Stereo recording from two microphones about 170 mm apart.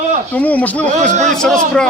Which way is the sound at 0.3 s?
10° left (ahead or behind).